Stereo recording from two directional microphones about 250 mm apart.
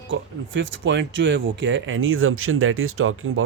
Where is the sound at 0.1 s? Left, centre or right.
Right.